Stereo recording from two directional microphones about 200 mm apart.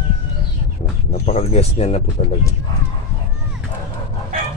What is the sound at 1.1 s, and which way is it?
Speech, 35° left (ahead or behind).